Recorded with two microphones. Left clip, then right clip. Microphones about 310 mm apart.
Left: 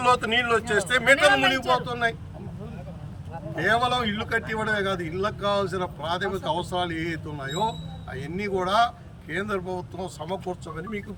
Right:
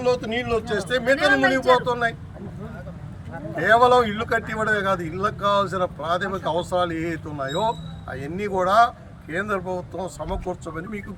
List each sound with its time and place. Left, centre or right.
0.2 s speech: centre
0.7 s speech: centre
1.8 s speech: centre
3.6 s speech: centre
10.2 s speech: centre